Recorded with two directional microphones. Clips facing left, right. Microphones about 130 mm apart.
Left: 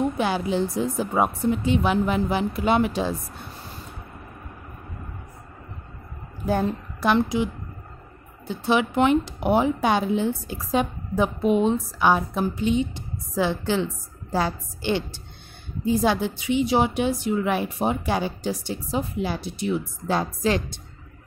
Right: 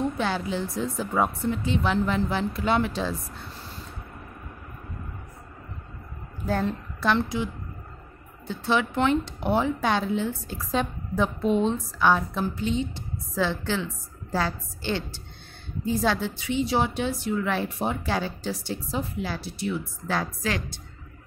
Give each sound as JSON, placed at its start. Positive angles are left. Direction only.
{"t": 0.0, "sound": "speech", "side_deg": 15}
{"t": 6.4, "sound": "a woman's voice", "side_deg": 15}
{"t": 8.5, "sound": "speech", "side_deg": 15}